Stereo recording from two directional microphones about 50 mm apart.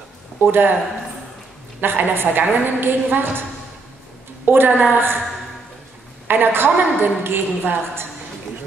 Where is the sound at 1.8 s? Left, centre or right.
Right.